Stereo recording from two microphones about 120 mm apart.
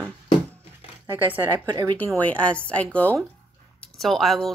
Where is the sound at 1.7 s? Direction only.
35° right (ahead or behind).